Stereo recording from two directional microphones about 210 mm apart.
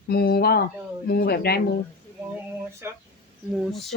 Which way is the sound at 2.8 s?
10° right (ahead or behind).